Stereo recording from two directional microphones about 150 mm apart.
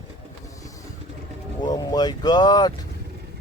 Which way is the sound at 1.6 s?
25° left (ahead or behind).